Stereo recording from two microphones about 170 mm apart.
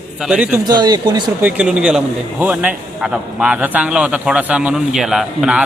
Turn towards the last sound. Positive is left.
turn(degrees=-5)  # may be behind; listen again after turning